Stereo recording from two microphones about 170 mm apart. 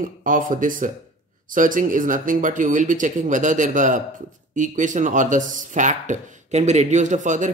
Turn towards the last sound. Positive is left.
turn(degrees=-45)  # may be behind; listen again after turning